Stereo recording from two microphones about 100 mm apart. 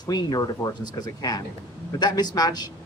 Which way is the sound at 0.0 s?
45° left (ahead or behind).